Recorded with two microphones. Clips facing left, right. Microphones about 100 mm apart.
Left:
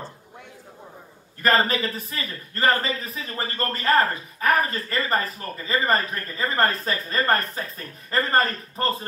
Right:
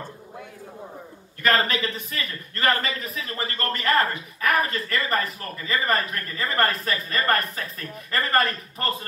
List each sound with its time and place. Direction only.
1.6 s a man's voice: 35° left (ahead or behind)